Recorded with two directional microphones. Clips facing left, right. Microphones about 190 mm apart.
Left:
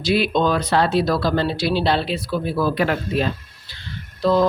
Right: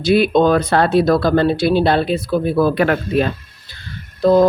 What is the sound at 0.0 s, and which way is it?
Speech, 50° right (ahead or behind).